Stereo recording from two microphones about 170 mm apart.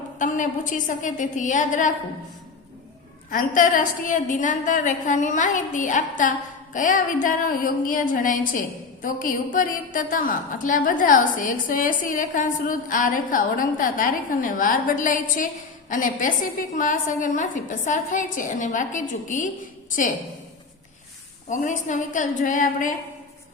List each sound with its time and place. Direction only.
0.2 s a woman's voice: 50° left (ahead or behind)
3.2 s a woman's voice: 55° left (ahead or behind)
21.5 s a woman's voice: 45° left (ahead or behind)